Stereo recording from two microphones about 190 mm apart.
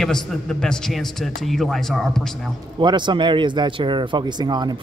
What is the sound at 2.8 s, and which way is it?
Speech, 25° right (ahead or behind).